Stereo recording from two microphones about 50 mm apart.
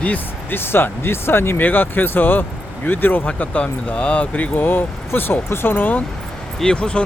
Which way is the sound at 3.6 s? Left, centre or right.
Left.